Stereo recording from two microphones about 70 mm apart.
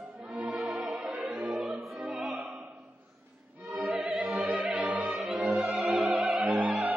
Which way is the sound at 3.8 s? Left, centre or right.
Centre.